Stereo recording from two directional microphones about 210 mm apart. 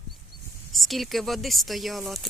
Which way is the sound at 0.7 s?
Centre (ahead or behind).